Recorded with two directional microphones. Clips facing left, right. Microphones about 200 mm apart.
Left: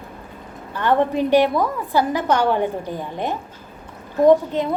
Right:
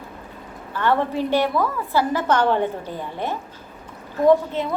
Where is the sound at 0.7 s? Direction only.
15° left (ahead or behind).